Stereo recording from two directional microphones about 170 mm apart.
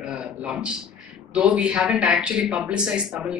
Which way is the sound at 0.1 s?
5° right (ahead or behind).